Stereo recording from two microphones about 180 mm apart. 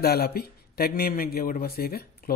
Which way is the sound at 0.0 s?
60° left (ahead or behind).